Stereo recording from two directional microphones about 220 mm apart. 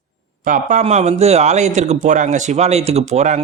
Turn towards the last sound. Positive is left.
turn(degrees=-30)  # may be behind; listen again after turning